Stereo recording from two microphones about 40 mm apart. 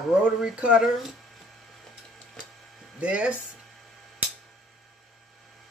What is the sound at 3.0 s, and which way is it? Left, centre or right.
Speech, right.